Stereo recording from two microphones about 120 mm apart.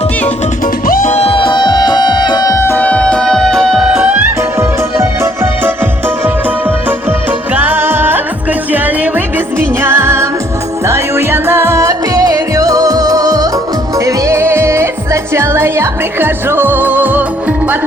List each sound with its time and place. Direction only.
1.0 s music: 60° left (ahead or behind); by 3.8 s 5° left (ahead or behind)
3.8 s music: 10° right (ahead or behind)
4.9 s music: 25° right (ahead or behind)
7.5 s music: 15° right (ahead or behind)
9.8 s music: 20° right (ahead or behind)